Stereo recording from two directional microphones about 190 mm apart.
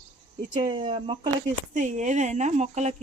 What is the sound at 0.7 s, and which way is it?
Speech, 25° right (ahead or behind).